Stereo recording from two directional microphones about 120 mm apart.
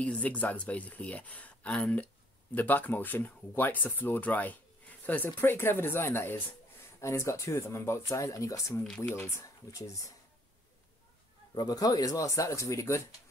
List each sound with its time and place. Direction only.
0.0 s speech: 10° left (ahead or behind)
8.8 s speech: 10° left (ahead or behind)
9.1 s speech: 25° left (ahead or behind)
11.5 s speech: 35° left (ahead or behind)